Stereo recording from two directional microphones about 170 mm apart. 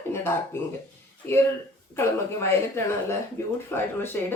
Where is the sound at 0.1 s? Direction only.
15° left (ahead or behind).